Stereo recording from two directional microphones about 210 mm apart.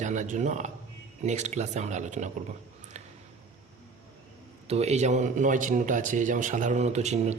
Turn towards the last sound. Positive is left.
turn(degrees=-35)  # may be behind; listen again after turning